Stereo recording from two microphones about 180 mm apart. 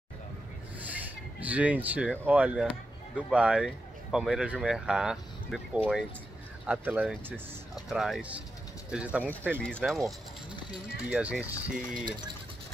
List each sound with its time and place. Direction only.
0.7 s speech: 10° right (ahead or behind)
9.6 s speech: 5° left (ahead or behind)